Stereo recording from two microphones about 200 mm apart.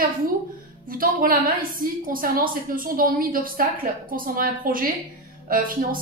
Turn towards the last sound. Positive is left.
turn(degrees=-45)  # may be behind; listen again after turning